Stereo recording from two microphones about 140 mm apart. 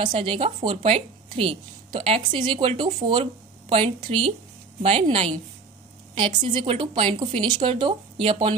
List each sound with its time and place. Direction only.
0.0 s a woman's voice: 40° right (ahead or behind)